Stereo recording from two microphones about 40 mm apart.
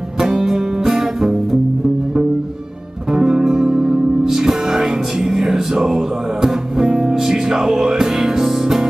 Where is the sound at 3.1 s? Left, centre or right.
Centre.